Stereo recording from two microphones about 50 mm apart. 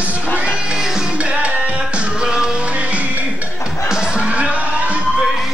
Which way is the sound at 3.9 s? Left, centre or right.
Centre.